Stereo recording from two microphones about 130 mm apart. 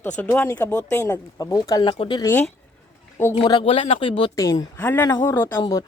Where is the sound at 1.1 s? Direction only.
25° left (ahead or behind).